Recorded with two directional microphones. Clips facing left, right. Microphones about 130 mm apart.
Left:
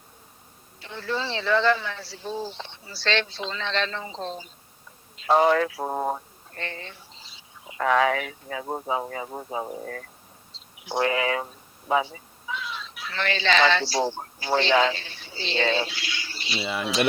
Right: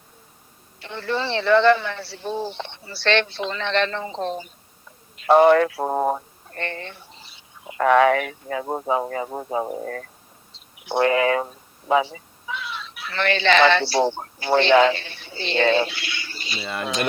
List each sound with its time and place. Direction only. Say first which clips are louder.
0.8 s a man's voice: right 4 dB; 65° right (ahead or behind)
6.5 s speech: right 5 dB; 60° right (ahead or behind)
8.6 s a man's voice: right 4 dB; 70° right (ahead or behind); by 11.4 s 50° right (ahead or behind)
11.9 s a man's voice: right 4 dB; 80° right; by 16.6 s 45° right (ahead or behind)
16.6 s speech: even; 5° left (ahead or behind)